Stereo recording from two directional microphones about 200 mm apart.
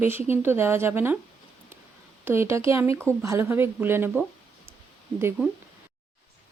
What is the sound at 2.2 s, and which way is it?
A woman's voice, 10° right (ahead or behind).